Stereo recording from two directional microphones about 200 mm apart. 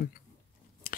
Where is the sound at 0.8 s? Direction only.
45° left (ahead or behind).